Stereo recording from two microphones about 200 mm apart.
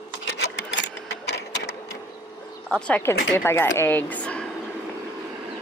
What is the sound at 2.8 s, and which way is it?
Speech, 10° left (ahead or behind).